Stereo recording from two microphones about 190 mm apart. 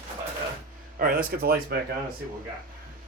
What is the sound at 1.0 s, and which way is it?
Speech, 50° right (ahead or behind).